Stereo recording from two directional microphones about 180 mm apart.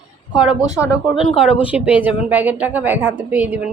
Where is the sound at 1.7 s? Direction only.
10° right (ahead or behind).